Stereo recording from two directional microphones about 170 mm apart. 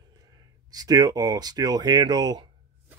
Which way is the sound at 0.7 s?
25° right (ahead or behind).